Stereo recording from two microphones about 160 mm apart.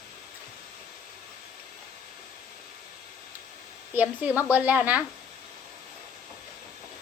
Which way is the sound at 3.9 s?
10° right (ahead or behind).